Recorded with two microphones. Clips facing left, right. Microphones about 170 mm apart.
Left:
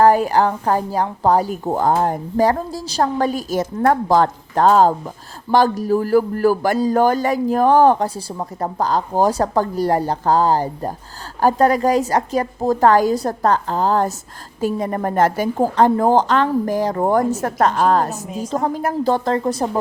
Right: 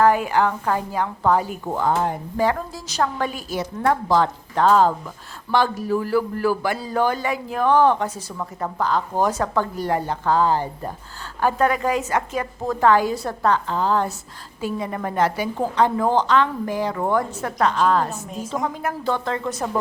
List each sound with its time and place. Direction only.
0.0 s a woman's voice: 35° left (ahead or behind)